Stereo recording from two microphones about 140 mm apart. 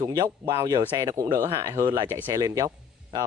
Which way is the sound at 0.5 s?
30° right (ahead or behind).